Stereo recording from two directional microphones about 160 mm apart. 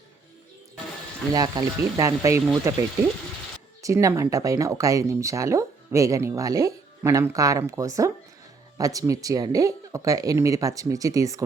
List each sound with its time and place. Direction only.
1.3 s speech: 25° right (ahead or behind)
3.8 s speech: 20° right (ahead or behind)